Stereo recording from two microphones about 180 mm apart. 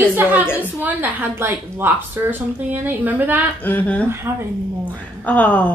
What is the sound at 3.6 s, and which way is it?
Speech, 10° left (ahead or behind).